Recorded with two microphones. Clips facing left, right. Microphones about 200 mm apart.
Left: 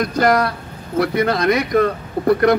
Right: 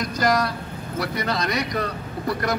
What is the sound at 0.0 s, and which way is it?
Speech, 60° left (ahead or behind).